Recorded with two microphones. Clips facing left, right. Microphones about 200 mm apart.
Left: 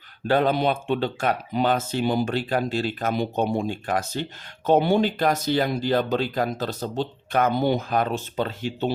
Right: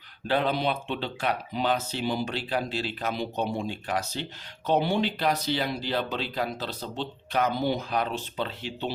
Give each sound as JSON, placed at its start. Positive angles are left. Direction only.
{"t": 0.3, "sound": "speech", "side_deg": 45}